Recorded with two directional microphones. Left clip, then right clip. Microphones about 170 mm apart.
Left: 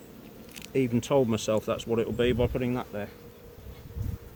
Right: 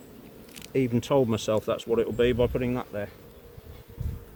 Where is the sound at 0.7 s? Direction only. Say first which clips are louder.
Right 1 dB; 55° right (ahead or behind); by 3.0 s 70° right (ahead or behind).